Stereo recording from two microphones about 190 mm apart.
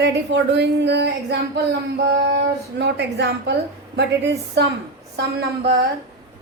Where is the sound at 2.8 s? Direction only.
65° right (ahead or behind).